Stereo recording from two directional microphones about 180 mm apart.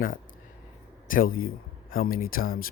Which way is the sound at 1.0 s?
50° left (ahead or behind).